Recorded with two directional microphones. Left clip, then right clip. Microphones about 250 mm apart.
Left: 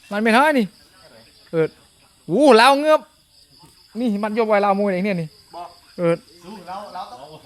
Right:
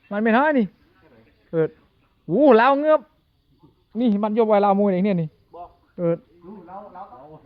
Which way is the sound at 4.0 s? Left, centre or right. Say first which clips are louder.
Right 1 dB; centre.